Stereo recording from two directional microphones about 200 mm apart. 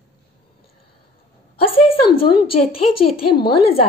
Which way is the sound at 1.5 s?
30° left (ahead or behind).